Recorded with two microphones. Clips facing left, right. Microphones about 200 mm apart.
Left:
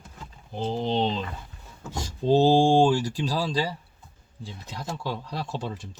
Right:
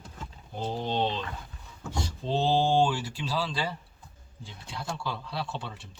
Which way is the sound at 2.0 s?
40° left (ahead or behind).